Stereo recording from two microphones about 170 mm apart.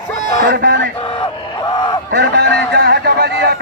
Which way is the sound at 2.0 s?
90° right.